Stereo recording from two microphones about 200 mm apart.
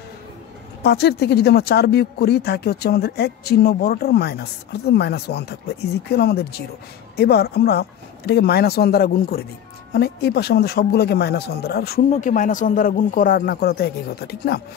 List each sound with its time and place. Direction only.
0.8 s speech: 55° left (ahead or behind)
12.1 s speech: 40° left (ahead or behind)